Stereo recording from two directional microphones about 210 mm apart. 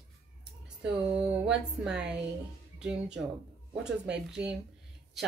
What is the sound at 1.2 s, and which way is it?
Speech, 5° right (ahead or behind).